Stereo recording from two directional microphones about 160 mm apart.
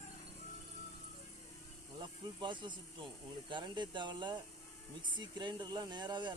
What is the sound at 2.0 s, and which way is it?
Speech, 30° right (ahead or behind).